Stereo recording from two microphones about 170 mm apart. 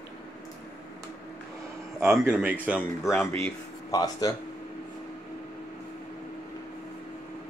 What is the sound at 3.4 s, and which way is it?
Speech, 20° left (ahead or behind).